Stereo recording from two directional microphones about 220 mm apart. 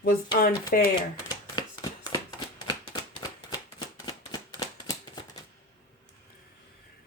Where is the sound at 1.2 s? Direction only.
20° left (ahead or behind).